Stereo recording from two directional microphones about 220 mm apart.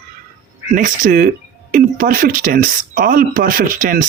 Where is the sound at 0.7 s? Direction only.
35° right (ahead or behind).